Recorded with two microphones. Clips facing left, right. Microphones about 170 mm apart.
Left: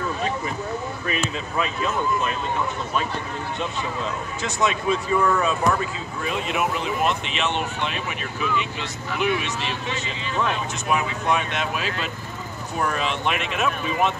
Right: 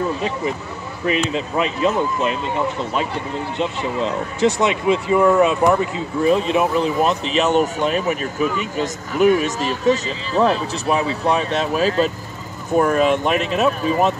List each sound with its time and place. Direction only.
1.0 s speech: 25° right (ahead or behind)
3.5 s speech: 30° right (ahead or behind)
4.8 s speech: 20° right (ahead or behind)
6.2 s speech: 30° right (ahead or behind)